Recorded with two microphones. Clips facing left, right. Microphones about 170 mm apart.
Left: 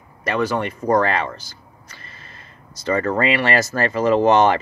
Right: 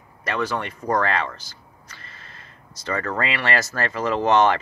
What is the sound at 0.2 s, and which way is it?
Speech, 10° left (ahead or behind).